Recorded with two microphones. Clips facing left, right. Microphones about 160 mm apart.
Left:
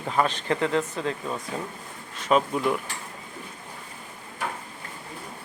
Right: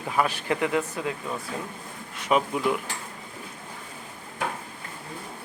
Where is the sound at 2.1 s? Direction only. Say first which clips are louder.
Left 1 dB; 10° right (ahead or behind).